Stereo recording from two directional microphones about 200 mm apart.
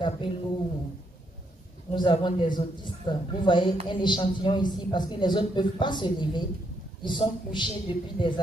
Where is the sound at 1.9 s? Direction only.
25° left (ahead or behind).